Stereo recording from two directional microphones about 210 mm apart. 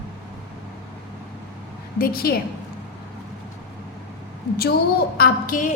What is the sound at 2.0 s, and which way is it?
Speech, 45° left (ahead or behind).